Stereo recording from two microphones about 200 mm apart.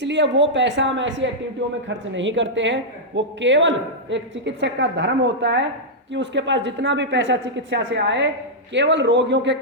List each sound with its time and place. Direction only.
0.0 s a woman's voice: 60° right (ahead or behind)